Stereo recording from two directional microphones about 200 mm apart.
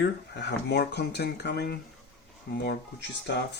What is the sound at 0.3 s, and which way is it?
Speech, 55° left (ahead or behind).